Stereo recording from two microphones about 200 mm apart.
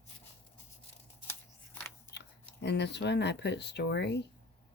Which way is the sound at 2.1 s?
55° left (ahead or behind).